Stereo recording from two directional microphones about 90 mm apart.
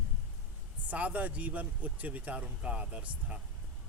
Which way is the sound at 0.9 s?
15° right (ahead or behind).